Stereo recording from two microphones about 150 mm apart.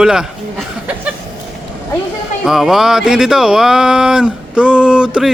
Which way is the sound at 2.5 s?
Centre (ahead or behind).